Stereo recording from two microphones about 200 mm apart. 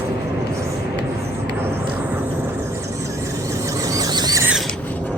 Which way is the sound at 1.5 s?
10° right (ahead or behind).